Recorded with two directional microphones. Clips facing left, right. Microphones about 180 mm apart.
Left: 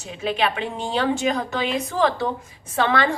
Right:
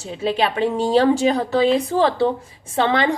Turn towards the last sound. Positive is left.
turn(degrees=-20)  # may be behind; listen again after turning